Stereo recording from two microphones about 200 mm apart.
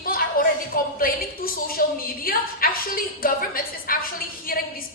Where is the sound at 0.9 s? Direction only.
45° left (ahead or behind).